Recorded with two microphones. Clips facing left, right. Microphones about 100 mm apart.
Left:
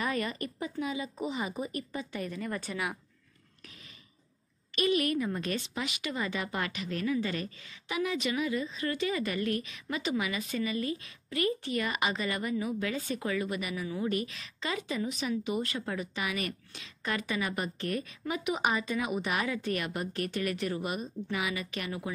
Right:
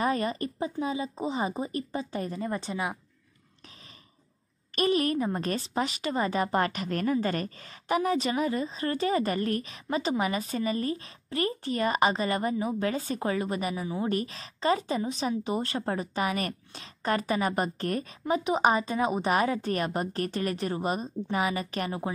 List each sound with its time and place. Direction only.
0.0 s a woman's voice: 35° right (ahead or behind)
4.7 s a woman's voice: 35° right (ahead or behind)